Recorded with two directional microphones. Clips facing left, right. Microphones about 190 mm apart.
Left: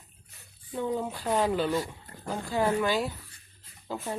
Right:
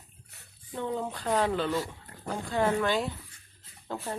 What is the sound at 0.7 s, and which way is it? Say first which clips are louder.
Speech: left 2 dB; 5° left (ahead or behind).